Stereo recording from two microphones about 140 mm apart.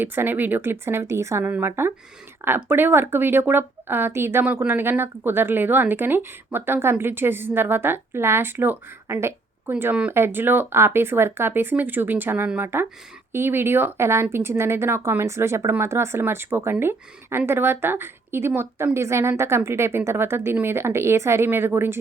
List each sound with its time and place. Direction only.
0.0 s speech: 15° right (ahead or behind)